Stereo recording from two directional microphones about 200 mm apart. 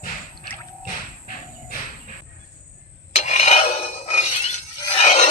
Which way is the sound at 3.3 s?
35° left (ahead or behind).